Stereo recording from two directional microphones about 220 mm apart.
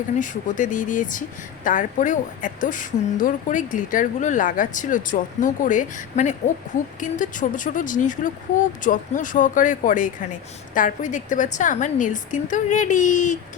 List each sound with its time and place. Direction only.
0.2 s speech: 35° left (ahead or behind)